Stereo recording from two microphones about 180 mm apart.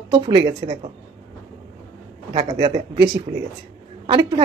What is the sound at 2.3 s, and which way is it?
Speech, 30° right (ahead or behind).